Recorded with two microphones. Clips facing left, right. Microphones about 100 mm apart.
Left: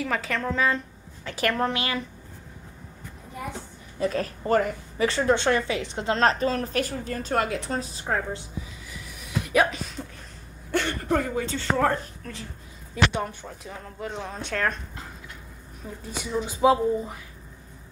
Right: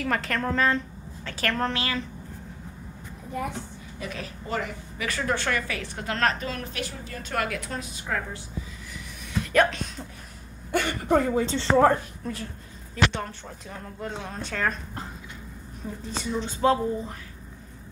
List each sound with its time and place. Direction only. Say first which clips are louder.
0.0 s speech: right 1 dB; 5° left (ahead or behind)
1.2 s speech: left 2 dB; 15° left (ahead or behind)
4.0 s a woman's voice: left 10 dB; 45° left (ahead or behind)
5.0 s a woman's voice: left 6 dB; 25° left (ahead or behind)
6.4 s a woman's voice: left 7 dB; 35° left (ahead or behind)
7.3 s a woman's voice: left 3 dB; 30° left (ahead or behind)
9.4 s speech: right 1 dB; 10° left (ahead or behind)
10.7 s speech: right 1 dB; 15° right (ahead or behind)
11.1 s a woman's voice: right 6 dB; 25° right (ahead or behind)
12.9 s speech: left 1 dB; 15° left (ahead or behind)
13.5 s speech: even; centre (ahead or behind)
16.3 s speech: left 2 dB; 10° left (ahead or behind)